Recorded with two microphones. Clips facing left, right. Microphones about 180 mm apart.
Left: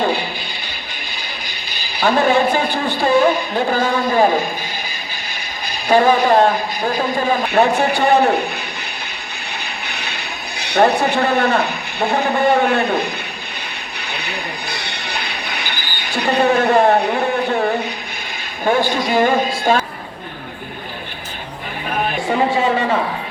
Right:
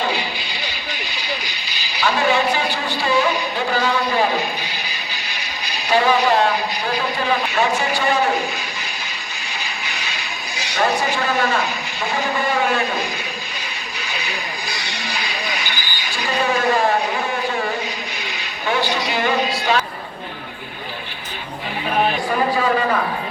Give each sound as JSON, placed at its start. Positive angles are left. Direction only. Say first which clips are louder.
{"t": 0.0, "sound": "a sound", "louder": "left 4 dB", "side_deg": 55}
{"t": 2.0, "sound": "a man's voice", "louder": "left 4 dB", "side_deg": 50}
{"t": 5.6, "sound": "a man's voice", "louder": "left 4 dB", "side_deg": 50}
{"t": 9.5, "sound": "a sound", "louder": "left 1 dB", "side_deg": 60}
{"t": 18.6, "sound": "a man's voice", "louder": "left 5 dB", "side_deg": 50}
{"t": 22.3, "sound": "speech", "louder": "left 3 dB", "side_deg": 25}